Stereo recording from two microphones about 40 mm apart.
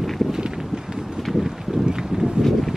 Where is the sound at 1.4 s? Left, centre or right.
Centre.